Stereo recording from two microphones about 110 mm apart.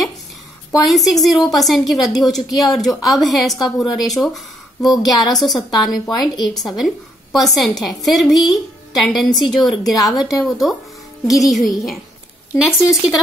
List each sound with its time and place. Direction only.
0.8 s a woman's voice: centre (ahead or behind)